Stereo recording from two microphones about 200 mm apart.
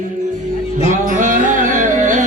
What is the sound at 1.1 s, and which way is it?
Music, 40° right (ahead or behind).